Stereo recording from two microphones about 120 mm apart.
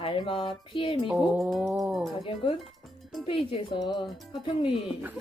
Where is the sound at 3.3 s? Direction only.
45° left (ahead or behind).